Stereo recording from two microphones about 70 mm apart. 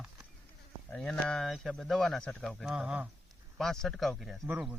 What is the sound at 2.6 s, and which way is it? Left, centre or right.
Speech, centre.